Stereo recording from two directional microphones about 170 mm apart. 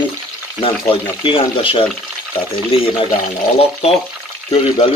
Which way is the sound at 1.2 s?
30° left (ahead or behind).